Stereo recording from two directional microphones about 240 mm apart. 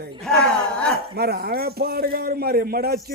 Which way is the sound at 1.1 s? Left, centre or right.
Right.